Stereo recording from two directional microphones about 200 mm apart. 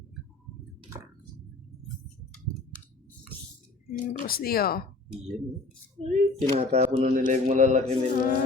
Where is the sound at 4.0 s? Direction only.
45° left (ahead or behind).